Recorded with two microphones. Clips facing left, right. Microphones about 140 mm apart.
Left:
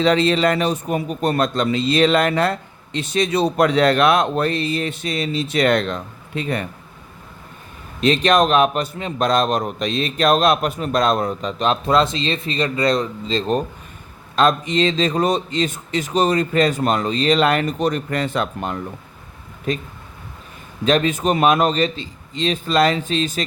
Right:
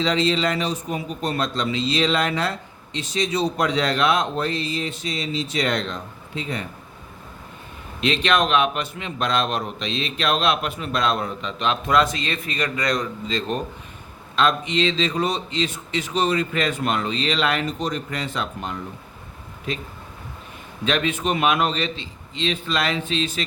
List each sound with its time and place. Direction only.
0.0 s a man's voice: 55° left (ahead or behind)
8.0 s a man's voice: 40° left (ahead or behind)
14.3 s a man's voice: 45° left (ahead or behind)
20.8 s a man's voice: 40° left (ahead or behind)